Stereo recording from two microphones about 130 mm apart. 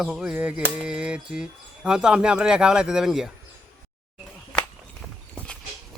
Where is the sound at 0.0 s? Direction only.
5° right (ahead or behind).